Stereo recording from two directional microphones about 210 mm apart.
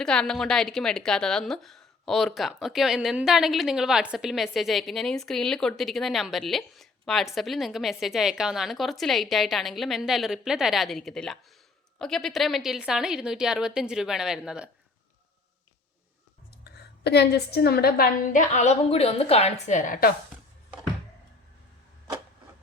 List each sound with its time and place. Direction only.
0.0 s a woman's voice: 5° left (ahead or behind)
16.6 s a woman's voice: 50° left (ahead or behind)